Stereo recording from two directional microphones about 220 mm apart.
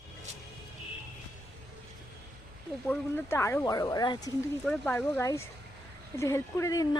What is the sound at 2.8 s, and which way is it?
Speech, 10° left (ahead or behind).